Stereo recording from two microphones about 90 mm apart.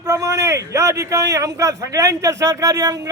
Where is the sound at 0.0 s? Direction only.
40° right (ahead or behind).